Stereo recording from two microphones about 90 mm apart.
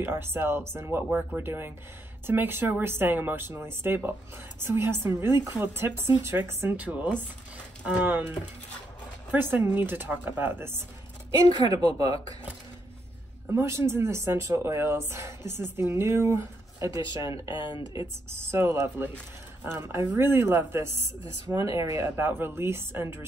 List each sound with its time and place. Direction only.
0.0 s speech: 25° right (ahead or behind)
11.7 s speech: 50° right (ahead or behind)
13.5 s speech: 30° right (ahead or behind)
17.6 s speech: 60° left (ahead or behind)
18.0 s speech: 30° right (ahead or behind)